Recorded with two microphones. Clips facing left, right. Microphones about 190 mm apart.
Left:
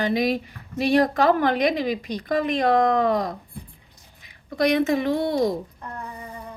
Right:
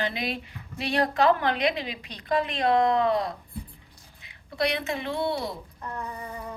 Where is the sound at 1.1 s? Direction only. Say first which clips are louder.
Left 3 dB; 45° left (ahead or behind).